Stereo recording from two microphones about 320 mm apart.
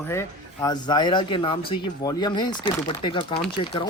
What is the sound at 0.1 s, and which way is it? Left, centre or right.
Speech, centre.